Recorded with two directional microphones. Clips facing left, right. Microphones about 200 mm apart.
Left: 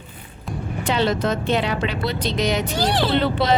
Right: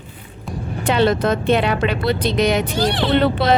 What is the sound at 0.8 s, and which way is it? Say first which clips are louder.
Speech: right 4 dB; 55° right (ahead or behind).